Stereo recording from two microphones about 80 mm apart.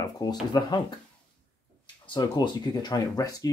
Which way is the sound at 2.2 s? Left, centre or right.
Left.